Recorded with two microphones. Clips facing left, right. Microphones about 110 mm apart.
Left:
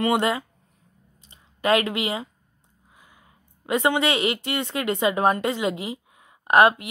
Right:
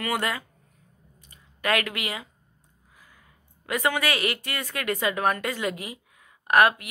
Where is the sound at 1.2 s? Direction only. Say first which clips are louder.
Left 5 dB; 25° left (ahead or behind).